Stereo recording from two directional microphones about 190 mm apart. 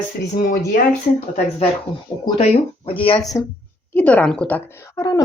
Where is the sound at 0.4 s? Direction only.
45° left (ahead or behind).